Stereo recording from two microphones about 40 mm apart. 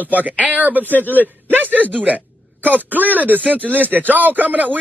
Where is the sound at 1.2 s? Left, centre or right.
Right.